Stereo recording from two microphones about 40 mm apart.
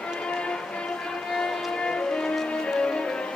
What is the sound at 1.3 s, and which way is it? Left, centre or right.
Vehicle, centre.